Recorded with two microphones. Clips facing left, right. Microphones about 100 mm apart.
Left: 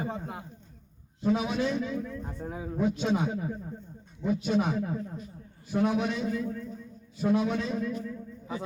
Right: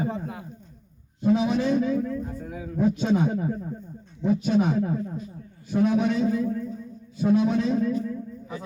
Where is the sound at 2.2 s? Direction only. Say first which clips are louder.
Right 2 dB; 35° left (ahead or behind).